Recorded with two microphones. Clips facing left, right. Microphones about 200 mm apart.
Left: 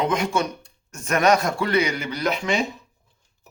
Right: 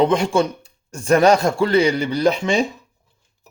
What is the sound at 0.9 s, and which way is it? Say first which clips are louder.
A man's voice: right 5 dB; 30° right (ahead or behind).